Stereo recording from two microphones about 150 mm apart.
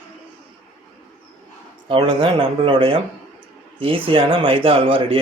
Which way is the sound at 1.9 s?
35° right (ahead or behind).